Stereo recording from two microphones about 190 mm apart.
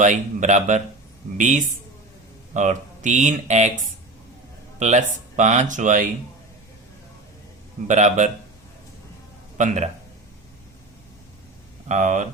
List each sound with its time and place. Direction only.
0.0 s speech: 40° right (ahead or behind)
4.8 s speech: 40° right (ahead or behind)
7.9 s speech: 40° right (ahead or behind)
9.6 s speech: 40° right (ahead or behind)
11.9 s speech: 40° right (ahead or behind)